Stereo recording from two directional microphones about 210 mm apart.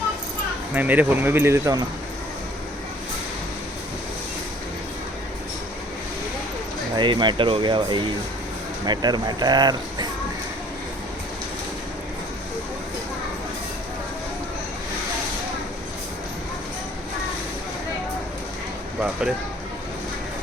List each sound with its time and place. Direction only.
0.7 s speech: 10° right (ahead or behind)
6.9 s speech: 20° right (ahead or behind)